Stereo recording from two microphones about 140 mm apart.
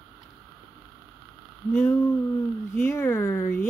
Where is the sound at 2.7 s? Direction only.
15° left (ahead or behind).